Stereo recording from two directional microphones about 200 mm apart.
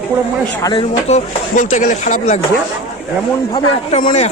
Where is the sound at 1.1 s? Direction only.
35° left (ahead or behind).